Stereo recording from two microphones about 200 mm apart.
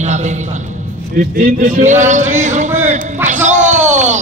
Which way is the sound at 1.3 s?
45° right (ahead or behind).